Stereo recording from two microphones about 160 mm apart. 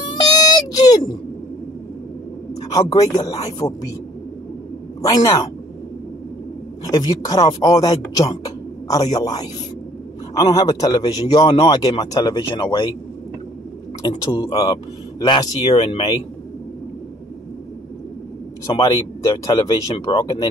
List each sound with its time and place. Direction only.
0.2 s a sound: 25° left (ahead or behind)
2.7 s speech: 20° left (ahead or behind)
5.0 s speech: 25° left (ahead or behind)
6.8 s speech: 20° left (ahead or behind)
14.0 s speech: 25° left (ahead or behind)
18.7 s speech: 25° left (ahead or behind)